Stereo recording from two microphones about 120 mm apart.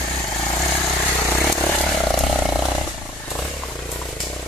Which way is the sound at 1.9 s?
Centre (ahead or behind).